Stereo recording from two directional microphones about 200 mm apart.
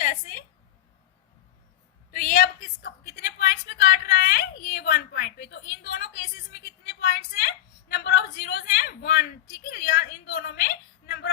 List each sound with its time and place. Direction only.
0.0 s a woman's voice: 45° left (ahead or behind)
2.1 s a sound: 45° left (ahead or behind)
9.6 s a woman's voice: 50° left (ahead or behind)